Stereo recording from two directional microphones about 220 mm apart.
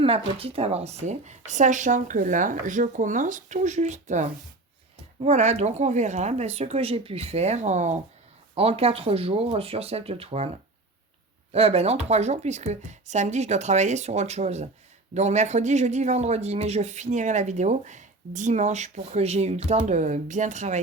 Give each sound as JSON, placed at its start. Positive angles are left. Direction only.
{"t": 0.0, "sound": "speech", "side_deg": -25}
{"t": 11.5, "sound": "speech", "side_deg": -25}